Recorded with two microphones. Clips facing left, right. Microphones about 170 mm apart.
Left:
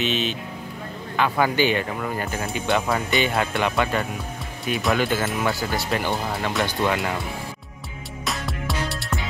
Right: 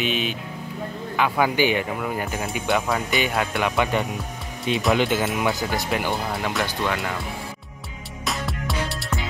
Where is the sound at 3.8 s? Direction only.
15° right (ahead or behind).